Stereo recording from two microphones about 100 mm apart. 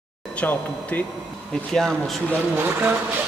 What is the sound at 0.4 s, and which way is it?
Speech, 15° left (ahead or behind).